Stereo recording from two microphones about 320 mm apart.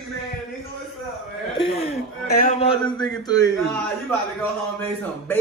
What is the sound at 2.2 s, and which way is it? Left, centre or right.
Speech, left.